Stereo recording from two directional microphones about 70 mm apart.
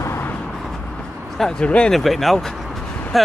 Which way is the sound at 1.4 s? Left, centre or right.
Centre.